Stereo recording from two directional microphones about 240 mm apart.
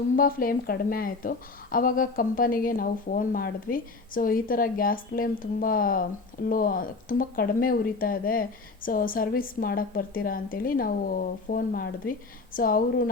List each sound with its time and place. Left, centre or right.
0.2 s speech: left